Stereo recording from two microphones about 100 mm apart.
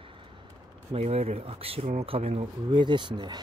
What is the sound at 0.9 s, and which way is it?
Speech, 90° right.